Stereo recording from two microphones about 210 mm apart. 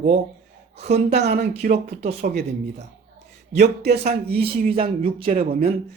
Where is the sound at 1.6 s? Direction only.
50° right (ahead or behind).